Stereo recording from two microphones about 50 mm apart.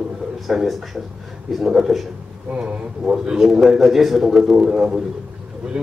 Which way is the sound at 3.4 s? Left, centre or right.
Centre.